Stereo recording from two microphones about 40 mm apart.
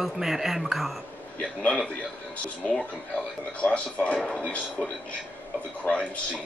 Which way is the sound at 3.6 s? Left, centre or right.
Left.